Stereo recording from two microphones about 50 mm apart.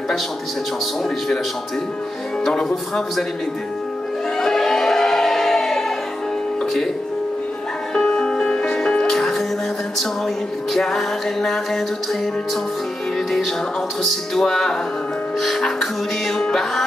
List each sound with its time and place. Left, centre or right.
2.4 s music: centre
4.4 s music: centre
7.9 s music: centre
10.7 s music: centre
14.0 s music: centre
16.3 s music: centre